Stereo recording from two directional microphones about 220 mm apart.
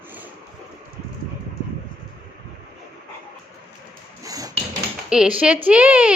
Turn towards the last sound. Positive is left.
turn(degrees=-5)  # may be behind; listen again after turning